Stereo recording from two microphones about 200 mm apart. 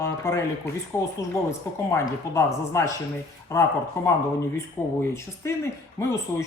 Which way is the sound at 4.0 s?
15° left (ahead or behind).